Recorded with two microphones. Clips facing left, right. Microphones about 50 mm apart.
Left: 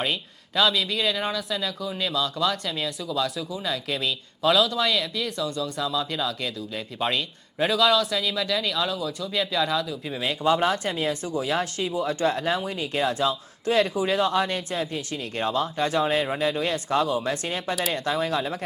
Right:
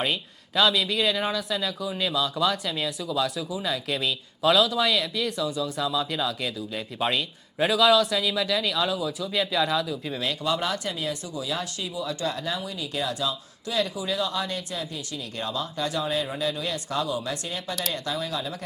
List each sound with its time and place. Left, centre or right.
0.0 s speech: centre
10.4 s speech: left